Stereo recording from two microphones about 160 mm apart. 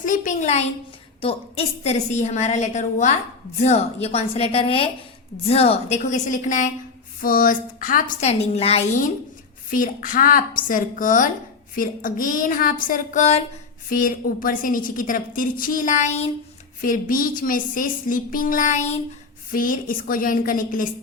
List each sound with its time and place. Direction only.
0.0 s a woman's voice: 55° left (ahead or behind)
9.6 s a woman's voice: 60° left (ahead or behind)
16.8 s a woman's voice: 60° left (ahead or behind)
19.5 s a woman's voice: 60° left (ahead or behind)